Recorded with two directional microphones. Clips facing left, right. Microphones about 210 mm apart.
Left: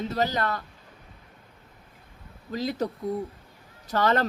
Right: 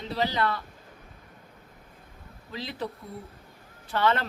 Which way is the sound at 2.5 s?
45° left (ahead or behind).